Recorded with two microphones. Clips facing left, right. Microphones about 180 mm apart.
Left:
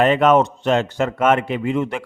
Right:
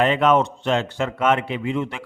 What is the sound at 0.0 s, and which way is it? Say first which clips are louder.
A man's voice: left 3 dB; 45° left (ahead or behind).